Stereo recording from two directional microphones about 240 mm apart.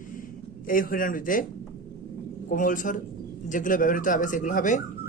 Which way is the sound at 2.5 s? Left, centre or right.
Left.